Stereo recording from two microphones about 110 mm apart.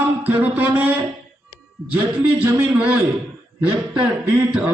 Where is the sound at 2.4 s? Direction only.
20° right (ahead or behind).